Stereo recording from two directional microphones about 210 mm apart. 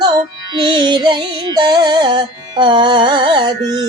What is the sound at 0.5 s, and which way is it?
Music, 20° right (ahead or behind).